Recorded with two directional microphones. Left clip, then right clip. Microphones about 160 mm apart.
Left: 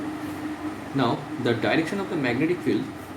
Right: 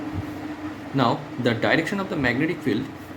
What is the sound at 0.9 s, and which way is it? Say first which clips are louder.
Speech: right 3 dB; 60° right (ahead or behind).